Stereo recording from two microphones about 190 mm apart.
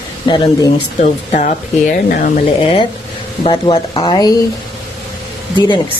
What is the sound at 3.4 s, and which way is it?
Speech, 30° left (ahead or behind).